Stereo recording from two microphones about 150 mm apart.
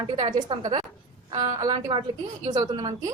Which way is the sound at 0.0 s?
30° right (ahead or behind).